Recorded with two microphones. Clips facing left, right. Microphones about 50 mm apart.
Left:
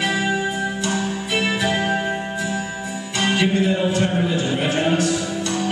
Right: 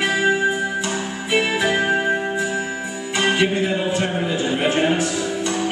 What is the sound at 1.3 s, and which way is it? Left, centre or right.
Music, centre.